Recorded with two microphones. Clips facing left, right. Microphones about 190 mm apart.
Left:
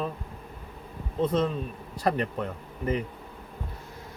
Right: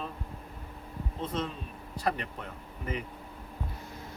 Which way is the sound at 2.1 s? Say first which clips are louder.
Left 6 dB; 40° left (ahead or behind).